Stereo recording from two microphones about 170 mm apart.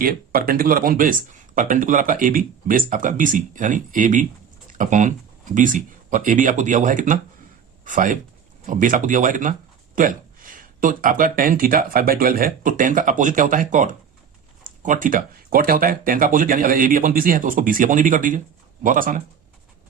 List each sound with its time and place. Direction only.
0.0 s speech: 60° right (ahead or behind)